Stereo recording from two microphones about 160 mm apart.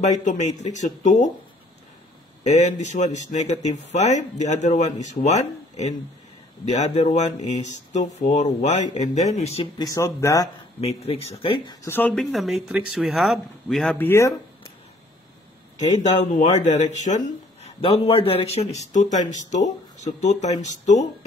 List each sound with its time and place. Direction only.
0.0 s speech: 50° left (ahead or behind)
2.4 s speech: 45° left (ahead or behind)
9.8 s speech: 20° left (ahead or behind)
10.8 s speech: 40° left (ahead or behind)
11.8 s speech: 15° left (ahead or behind)
14.0 s speech: 20° left (ahead or behind)
16.0 s speech: 45° left (ahead or behind)